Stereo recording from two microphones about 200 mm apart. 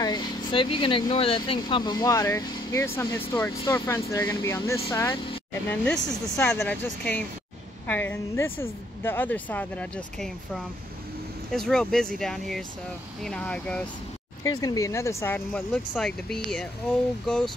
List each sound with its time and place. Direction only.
0.0 s speech: 25° left (ahead or behind)
5.7 s speech: 5° left (ahead or behind)
14.6 s speech: 15° left (ahead or behind)